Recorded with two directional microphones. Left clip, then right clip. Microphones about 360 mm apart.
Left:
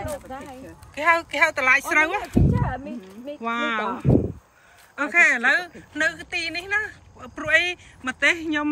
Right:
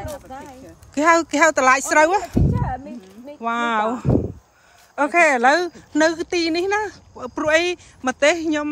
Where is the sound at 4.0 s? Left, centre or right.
Centre.